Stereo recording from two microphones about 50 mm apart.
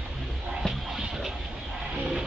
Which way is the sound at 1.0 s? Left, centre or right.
Centre.